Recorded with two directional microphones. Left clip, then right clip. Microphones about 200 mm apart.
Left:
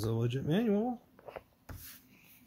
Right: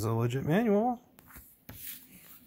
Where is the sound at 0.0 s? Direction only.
20° right (ahead or behind).